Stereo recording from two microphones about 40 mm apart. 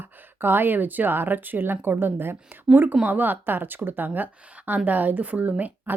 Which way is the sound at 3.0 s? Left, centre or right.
Right.